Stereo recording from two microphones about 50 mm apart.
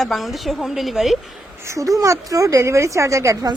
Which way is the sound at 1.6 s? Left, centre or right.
Right.